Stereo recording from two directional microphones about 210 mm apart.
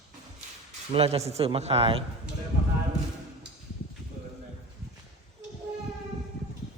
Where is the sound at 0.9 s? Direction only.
30° right (ahead or behind).